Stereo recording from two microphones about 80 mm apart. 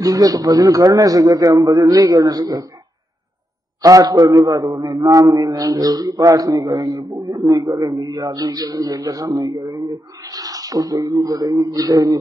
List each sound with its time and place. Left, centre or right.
0.0 s a man's voice: right
3.8 s a man's voice: right